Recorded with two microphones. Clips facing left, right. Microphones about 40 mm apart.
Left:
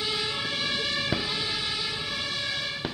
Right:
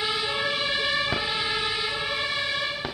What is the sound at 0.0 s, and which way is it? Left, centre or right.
Emergency vehicle, centre.